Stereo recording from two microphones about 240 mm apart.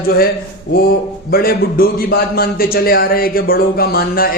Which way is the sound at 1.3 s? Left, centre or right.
Left.